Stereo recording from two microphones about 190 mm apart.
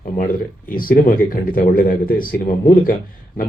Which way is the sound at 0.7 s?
50° left (ahead or behind).